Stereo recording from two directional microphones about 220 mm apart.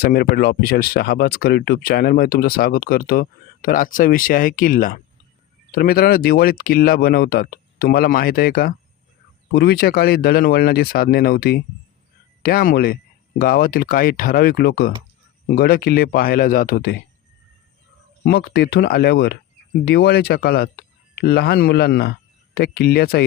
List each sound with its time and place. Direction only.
0.0 s speech: 45° left (ahead or behind)
18.3 s speech: 45° left (ahead or behind)